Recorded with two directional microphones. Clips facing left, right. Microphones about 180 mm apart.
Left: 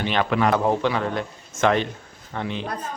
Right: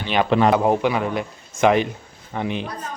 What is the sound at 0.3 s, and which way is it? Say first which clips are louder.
Speech: right 6 dB; 25° right (ahead or behind).